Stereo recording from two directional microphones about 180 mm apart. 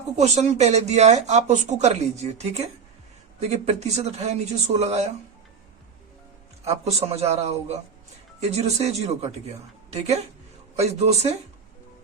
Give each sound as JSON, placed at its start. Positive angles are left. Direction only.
{"t": 0.2, "sound": "speech", "side_deg": -40}
{"t": 6.7, "sound": "speech", "side_deg": -35}
{"t": 10.8, "sound": "speech", "side_deg": -35}